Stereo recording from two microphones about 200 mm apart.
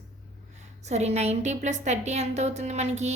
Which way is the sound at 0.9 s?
35° right (ahead or behind).